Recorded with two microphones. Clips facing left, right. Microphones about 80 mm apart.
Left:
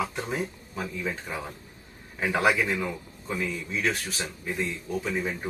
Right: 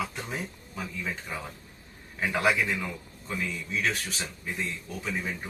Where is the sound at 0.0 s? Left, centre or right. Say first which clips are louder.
Left 4 dB; centre.